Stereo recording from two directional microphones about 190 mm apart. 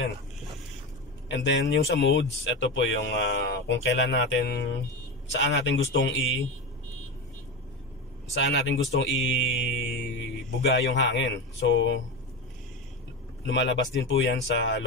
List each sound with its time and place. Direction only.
1.3 s speech: 70° left (ahead or behind)
8.4 s speech: 70° left (ahead or behind)
9.1 s mantra: 80° left
10.7 s speech: 75° left (ahead or behind)
13.5 s speech: 70° left (ahead or behind)